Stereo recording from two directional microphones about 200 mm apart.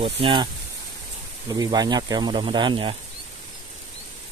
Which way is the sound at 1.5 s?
20° right (ahead or behind).